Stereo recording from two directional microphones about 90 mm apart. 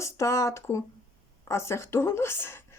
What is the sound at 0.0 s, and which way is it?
A woman's voice, 35° left (ahead or behind).